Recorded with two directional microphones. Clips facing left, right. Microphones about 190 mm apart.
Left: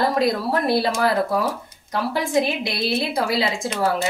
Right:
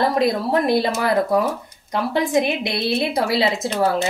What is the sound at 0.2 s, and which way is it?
Speech, 20° right (ahead or behind).